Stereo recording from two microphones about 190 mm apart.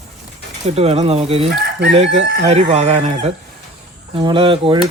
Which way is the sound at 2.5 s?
35° right (ahead or behind).